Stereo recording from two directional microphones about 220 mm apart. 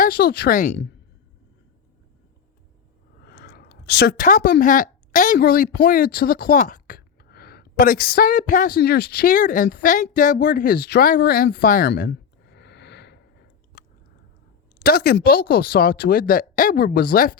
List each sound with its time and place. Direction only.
0.0 s speech: 45° left (ahead or behind)
3.2 s a sound: 45° left (ahead or behind)
4.6 s a woman's voice: 35° left (ahead or behind)
14.8 s speech: 45° left (ahead or behind)